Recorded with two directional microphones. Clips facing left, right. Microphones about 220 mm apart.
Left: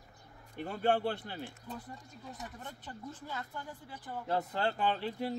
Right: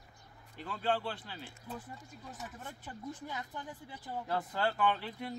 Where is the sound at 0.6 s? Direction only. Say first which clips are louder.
Left 4 dB; 50° left (ahead or behind).